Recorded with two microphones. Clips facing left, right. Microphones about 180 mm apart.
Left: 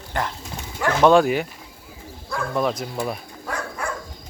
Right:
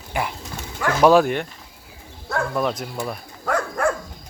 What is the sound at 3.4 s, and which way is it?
Dog, 60° right (ahead or behind).